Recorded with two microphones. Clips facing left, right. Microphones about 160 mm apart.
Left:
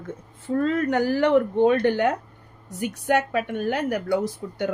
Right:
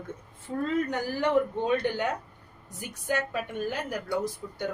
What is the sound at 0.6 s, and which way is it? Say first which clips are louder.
Speech: left 6 dB; 75° left (ahead or behind).